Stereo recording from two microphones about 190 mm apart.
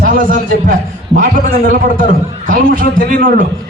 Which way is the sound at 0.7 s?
45° right (ahead or behind).